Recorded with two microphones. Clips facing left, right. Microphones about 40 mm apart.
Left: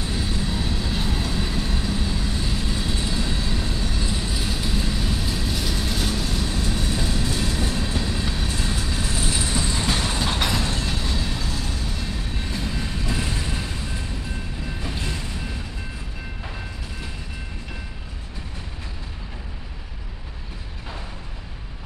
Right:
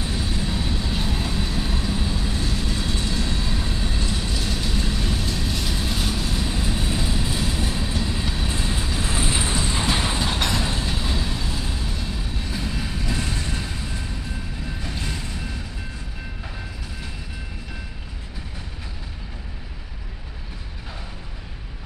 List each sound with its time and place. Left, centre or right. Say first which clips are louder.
0.1 s vehicle: even; centre
2.4 s vehicle: even; centre
4.0 s vehicle: even; centre
9.1 s vehicle: right 2 dB; right
9.8 s train: right 1 dB; centre
12.4 s vehicle: even; centre